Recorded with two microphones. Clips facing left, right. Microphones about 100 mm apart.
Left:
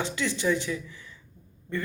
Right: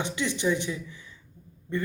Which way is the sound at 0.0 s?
20° right (ahead or behind).